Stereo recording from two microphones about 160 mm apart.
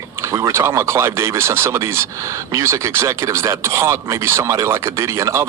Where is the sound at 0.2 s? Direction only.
20° right (ahead or behind).